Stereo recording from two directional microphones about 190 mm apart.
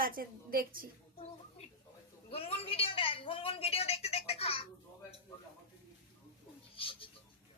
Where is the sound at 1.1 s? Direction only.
35° left (ahead or behind).